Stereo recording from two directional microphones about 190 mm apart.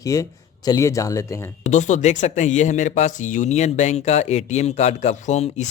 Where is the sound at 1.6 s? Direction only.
40° left (ahead or behind).